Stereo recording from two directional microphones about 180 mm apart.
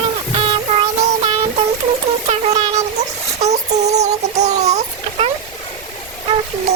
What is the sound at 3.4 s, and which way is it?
Child singing, 40° right (ahead or behind).